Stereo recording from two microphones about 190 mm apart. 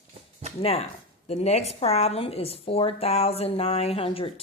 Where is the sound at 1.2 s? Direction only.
35° left (ahead or behind).